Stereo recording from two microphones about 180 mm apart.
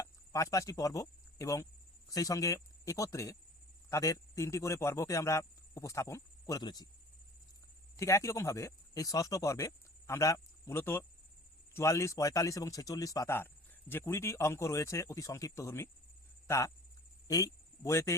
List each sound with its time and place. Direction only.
0.0 s speech: 20° left (ahead or behind)
7.9 s speech: 15° left (ahead or behind)